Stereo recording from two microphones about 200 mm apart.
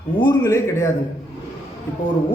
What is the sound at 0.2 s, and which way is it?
Speech, 20° left (ahead or behind).